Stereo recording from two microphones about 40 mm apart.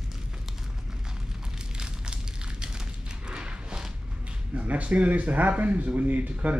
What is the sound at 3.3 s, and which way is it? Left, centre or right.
Horse, right.